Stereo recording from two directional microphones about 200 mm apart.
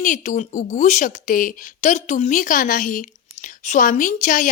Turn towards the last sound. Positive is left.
turn(degrees=40)  # may be behind; listen again after turning